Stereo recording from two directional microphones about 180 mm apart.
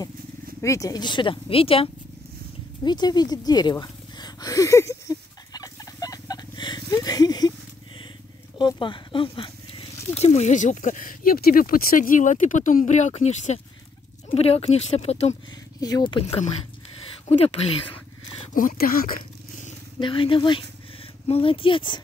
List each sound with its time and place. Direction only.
0.6 s speech: 15° left (ahead or behind)
2.8 s a sound: 25° left (ahead or behind)
8.5 s speech: 25° left (ahead or behind)
15.8 s speech: 25° left (ahead or behind)
18.5 s speech: 50° left (ahead or behind)
20.0 s speech: 30° left (ahead or behind)